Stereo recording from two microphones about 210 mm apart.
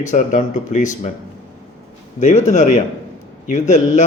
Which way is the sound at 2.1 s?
35° left (ahead or behind).